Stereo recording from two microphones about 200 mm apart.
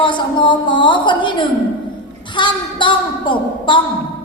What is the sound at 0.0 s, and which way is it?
A woman's voice, 25° left (ahead or behind).